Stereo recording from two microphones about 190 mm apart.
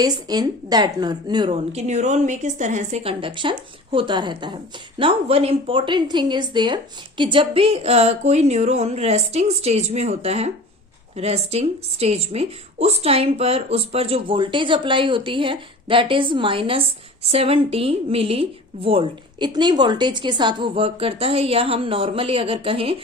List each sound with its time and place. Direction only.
0.0 s a woman's voice: 20° right (ahead or behind)
1.7 s a woman's voice: 40° right (ahead or behind)